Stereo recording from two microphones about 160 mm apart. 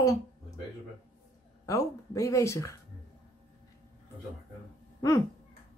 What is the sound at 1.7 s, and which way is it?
Speech, 20° left (ahead or behind).